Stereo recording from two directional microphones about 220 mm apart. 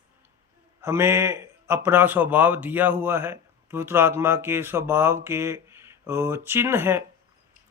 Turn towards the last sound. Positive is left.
turn(degrees=-10)  # may be behind; listen again after turning